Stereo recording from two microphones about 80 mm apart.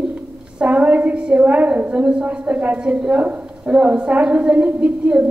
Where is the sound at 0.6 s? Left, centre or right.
Centre.